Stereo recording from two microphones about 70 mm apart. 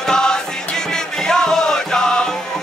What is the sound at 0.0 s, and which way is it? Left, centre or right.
Music, centre.